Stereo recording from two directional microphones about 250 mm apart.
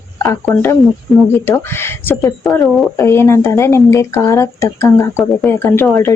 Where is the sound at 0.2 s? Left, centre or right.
Centre.